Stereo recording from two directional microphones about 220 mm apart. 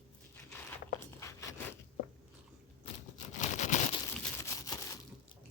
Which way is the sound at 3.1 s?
35° left (ahead or behind).